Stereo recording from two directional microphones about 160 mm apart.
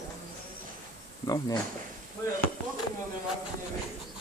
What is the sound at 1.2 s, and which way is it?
Speech, 20° left (ahead or behind).